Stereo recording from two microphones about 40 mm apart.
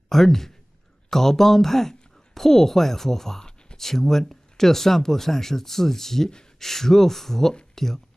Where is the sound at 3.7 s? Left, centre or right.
Centre.